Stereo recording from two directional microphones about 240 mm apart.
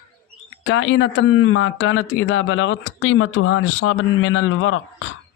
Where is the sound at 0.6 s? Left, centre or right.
Left.